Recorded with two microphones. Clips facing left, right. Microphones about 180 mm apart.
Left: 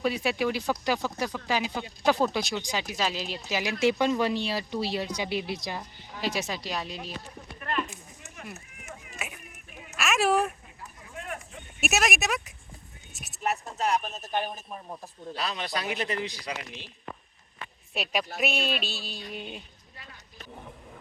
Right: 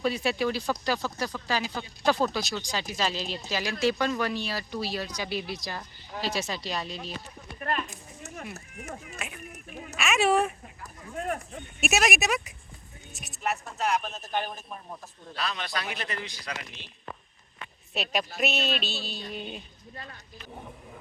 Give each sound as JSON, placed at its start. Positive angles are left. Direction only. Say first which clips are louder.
{"t": 0.2, "sound": "speech", "louder": "even", "side_deg": 10}
{"t": 2.9, "sound": "speech", "louder": "right 2 dB", "side_deg": 10}
{"t": 7.6, "sound": "a sound", "louder": "even", "side_deg": -35}
{"t": 8.5, "sound": "speech", "louder": "right 5 dB", "side_deg": -35}
{"t": 9.0, "sound": "a sound", "louder": "right 1 dB", "side_deg": 5}
{"t": 9.5, "sound": "a sound", "louder": "right 6 dB", "side_deg": -45}
{"t": 10.0, "sound": "speech", "louder": "right 1 dB", "side_deg": 0}
{"t": 11.1, "sound": "a sound", "louder": "right 7 dB", "side_deg": -40}
{"t": 11.8, "sound": "speech", "louder": "right 1 dB", "side_deg": 0}
{"t": 15.4, "sound": "speech", "louder": "left 1 dB", "side_deg": 20}
{"t": 16.5, "sound": "speech", "louder": "left 2 dB", "side_deg": 10}
{"t": 17.9, "sound": "speech", "louder": "even", "side_deg": 10}